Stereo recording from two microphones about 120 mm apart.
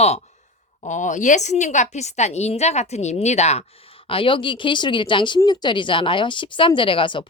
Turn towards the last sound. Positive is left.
turn(degrees=45)  # may be behind; listen again after turning